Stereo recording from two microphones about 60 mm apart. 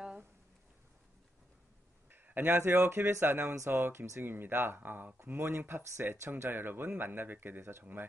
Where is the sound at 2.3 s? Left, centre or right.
Right.